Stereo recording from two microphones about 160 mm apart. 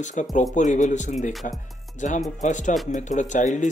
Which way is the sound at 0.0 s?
50° left (ahead or behind).